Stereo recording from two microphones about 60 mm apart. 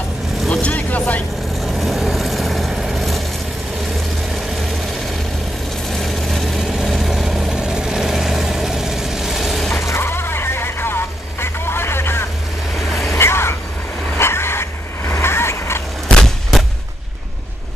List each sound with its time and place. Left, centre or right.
0.5 s vehicle: left
1.5 s vehicle: centre
4.6 s vehicle: centre
9.8 s vehicle: left
12.7 s vehicle: centre
13.2 s vehicle: left
16.2 s a sound: centre